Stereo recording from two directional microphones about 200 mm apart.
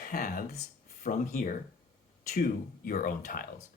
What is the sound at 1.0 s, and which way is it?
Speech, 40° left (ahead or behind).